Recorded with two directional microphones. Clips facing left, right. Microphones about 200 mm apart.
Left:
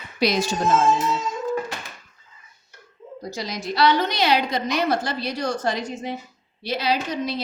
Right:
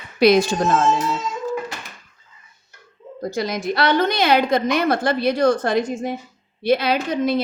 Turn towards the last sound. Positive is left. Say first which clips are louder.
# right 6 dB
turn(degrees=-55)  # may be behind; listen again after turning